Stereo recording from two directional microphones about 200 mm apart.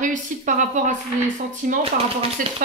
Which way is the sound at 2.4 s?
40° right (ahead or behind).